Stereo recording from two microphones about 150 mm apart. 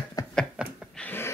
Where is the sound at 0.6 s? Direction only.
5° right (ahead or behind).